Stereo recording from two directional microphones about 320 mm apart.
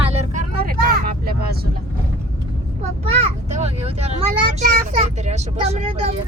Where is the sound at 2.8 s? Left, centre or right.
Centre.